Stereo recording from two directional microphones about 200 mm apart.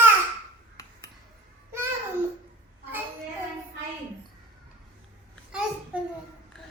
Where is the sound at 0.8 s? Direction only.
15° left (ahead or behind).